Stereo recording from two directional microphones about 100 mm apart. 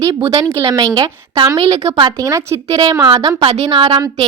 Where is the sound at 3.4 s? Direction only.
90° right; by 4.0 s 65° right (ahead or behind).